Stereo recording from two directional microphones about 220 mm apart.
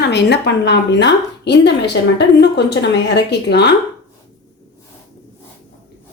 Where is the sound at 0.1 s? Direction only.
50° left (ahead or behind).